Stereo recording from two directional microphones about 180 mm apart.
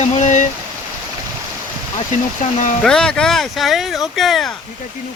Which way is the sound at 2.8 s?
5° left (ahead or behind).